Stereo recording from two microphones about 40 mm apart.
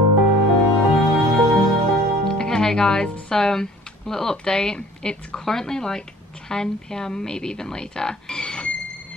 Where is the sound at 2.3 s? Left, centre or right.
Centre.